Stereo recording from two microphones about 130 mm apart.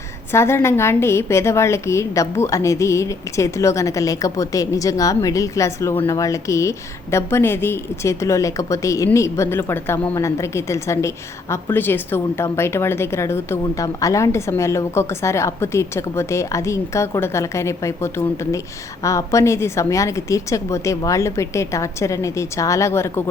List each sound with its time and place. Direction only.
0.3 s a woman's voice: 20° left (ahead or behind)